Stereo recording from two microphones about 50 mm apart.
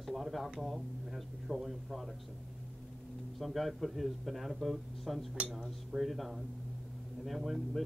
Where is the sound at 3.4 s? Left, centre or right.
Centre.